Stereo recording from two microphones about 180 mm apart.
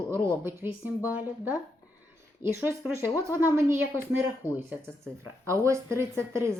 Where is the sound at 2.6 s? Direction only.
10° right (ahead or behind).